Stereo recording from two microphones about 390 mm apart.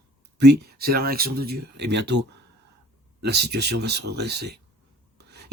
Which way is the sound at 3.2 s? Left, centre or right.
Right.